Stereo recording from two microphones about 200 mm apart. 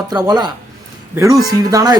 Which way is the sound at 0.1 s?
20° right (ahead or behind).